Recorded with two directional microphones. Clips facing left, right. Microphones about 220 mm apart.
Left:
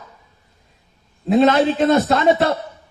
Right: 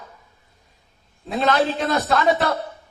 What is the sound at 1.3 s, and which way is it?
A man's voice, 25° left (ahead or behind).